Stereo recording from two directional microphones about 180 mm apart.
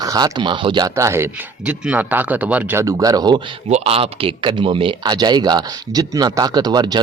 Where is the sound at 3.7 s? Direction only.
35° right (ahead or behind).